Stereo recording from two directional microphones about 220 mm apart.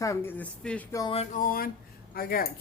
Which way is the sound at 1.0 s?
25° left (ahead or behind).